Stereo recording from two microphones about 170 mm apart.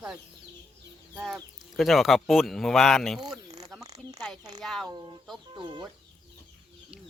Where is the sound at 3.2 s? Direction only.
20° right (ahead or behind).